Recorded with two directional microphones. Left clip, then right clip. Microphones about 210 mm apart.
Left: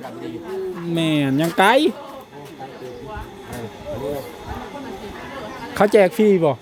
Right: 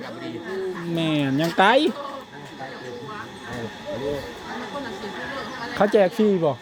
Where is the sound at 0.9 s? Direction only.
15° left (ahead or behind).